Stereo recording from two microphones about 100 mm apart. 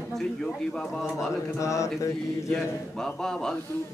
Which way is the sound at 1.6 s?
30° left (ahead or behind).